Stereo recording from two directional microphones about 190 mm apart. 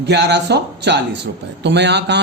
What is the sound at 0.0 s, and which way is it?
Speech, 65° right (ahead or behind).